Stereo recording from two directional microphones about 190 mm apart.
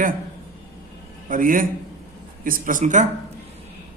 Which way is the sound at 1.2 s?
45° right (ahead or behind).